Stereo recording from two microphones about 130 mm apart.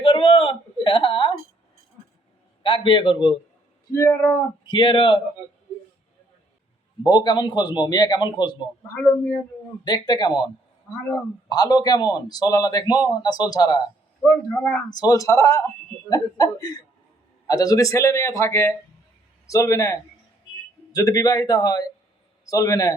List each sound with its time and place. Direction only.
0.0 s a sound: 45° left (ahead or behind)
2.6 s a man's voice: 40° left (ahead or behind)
3.9 s speech: 20° left (ahead or behind)
4.6 s a man's voice: 40° left (ahead or behind)
7.0 s a man's voice: 30° left (ahead or behind)
9.8 s a man's voice: 30° left (ahead or behind)
11.4 s a man's voice: 30° left (ahead or behind)
14.3 s speech: 20° left (ahead or behind)
14.8 s speech: 30° left (ahead or behind)